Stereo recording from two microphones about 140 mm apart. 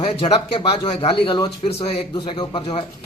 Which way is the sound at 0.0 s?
40° left (ahead or behind).